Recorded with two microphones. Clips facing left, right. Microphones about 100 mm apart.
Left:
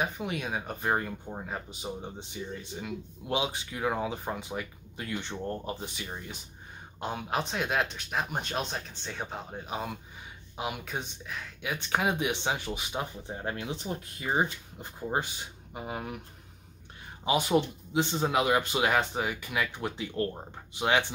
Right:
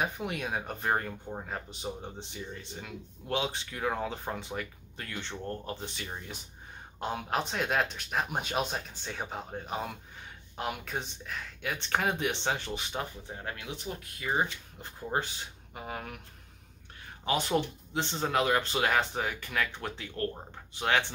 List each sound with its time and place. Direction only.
0.0 s speech: centre (ahead or behind)
13.3 s speech: 25° left (ahead or behind)
14.3 s speech: 15° left (ahead or behind)
17.2 s speech: 10° left (ahead or behind)